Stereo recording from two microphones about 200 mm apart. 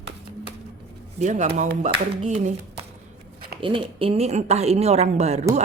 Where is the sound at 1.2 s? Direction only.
35° right (ahead or behind).